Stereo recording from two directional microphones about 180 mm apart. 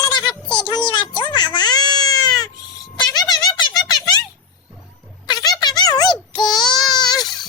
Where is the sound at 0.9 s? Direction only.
25° left (ahead or behind).